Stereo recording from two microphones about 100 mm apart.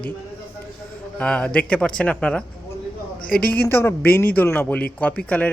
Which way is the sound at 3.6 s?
25° left (ahead or behind).